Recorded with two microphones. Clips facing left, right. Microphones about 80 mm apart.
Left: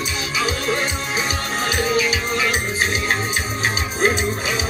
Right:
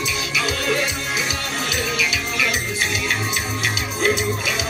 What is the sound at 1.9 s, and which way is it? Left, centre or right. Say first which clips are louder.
Music: left 4 dB; left.